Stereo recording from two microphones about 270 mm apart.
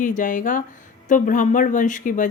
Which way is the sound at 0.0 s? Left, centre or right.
Left.